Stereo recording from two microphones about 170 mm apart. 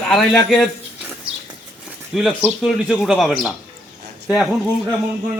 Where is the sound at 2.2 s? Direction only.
Centre (ahead or behind).